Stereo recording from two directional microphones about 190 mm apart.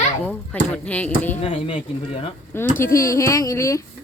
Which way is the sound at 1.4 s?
30° left (ahead or behind).